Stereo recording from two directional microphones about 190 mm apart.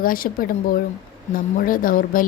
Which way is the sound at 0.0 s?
50° left (ahead or behind).